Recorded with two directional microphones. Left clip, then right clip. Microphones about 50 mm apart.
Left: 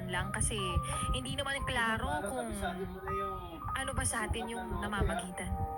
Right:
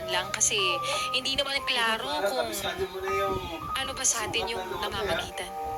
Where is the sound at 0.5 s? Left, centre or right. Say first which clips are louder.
Right 10 dB; centre.